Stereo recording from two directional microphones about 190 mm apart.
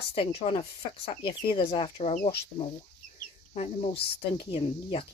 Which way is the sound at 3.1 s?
35° left (ahead or behind).